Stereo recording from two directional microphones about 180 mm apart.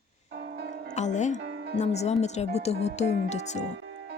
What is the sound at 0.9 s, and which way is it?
Speech, 40° left (ahead or behind).